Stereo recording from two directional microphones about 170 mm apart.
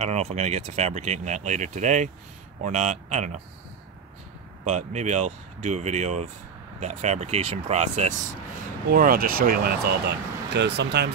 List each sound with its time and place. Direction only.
0.0 s speech: 40° right (ahead or behind)
4.6 s speech: 40° right (ahead or behind)
8.9 s speech: 55° right (ahead or behind)
10.5 s speech: 90° right